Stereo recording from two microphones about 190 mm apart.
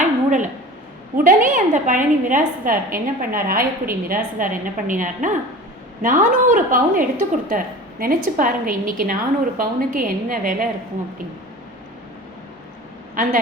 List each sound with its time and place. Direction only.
0.3 s a sound: 40° right (ahead or behind)
1.1 s a woman's voice: 45° right (ahead or behind)
13.2 s a woman's voice: 45° right (ahead or behind)